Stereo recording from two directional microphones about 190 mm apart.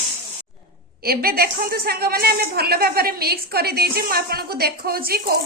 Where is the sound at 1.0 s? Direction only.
50° right (ahead or behind).